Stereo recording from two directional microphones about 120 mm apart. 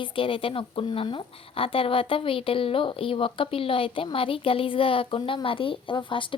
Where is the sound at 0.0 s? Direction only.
45° left (ahead or behind).